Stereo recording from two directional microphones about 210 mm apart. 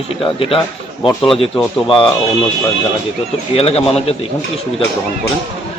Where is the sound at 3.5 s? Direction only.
30° left (ahead or behind).